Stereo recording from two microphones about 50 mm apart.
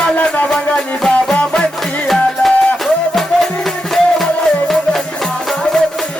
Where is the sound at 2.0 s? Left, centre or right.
Centre.